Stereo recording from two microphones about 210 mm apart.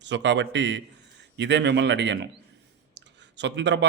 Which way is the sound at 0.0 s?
55° right (ahead or behind).